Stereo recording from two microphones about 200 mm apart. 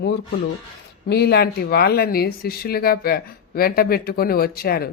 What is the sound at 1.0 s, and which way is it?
Speech, 55° left (ahead or behind).